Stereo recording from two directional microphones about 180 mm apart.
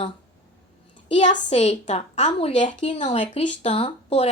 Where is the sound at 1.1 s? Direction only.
40° left (ahead or behind).